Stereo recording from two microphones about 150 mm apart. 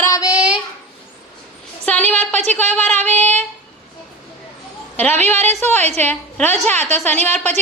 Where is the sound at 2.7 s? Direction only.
10° left (ahead or behind).